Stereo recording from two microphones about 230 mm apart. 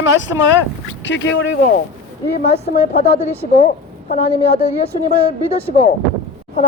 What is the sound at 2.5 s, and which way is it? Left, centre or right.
A woman's voice, left.